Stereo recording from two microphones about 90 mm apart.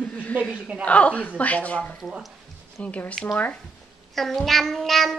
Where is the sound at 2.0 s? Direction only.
Centre (ahead or behind).